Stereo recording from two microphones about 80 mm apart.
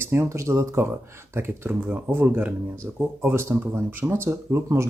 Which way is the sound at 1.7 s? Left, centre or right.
Right.